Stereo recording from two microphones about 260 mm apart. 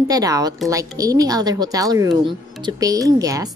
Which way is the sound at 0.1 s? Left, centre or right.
Centre.